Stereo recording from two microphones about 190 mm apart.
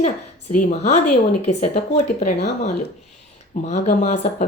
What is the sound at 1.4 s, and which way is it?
Speech, 40° left (ahead or behind).